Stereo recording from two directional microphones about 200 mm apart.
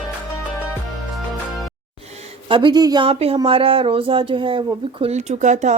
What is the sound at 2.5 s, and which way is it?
Speech, 20° right (ahead or behind).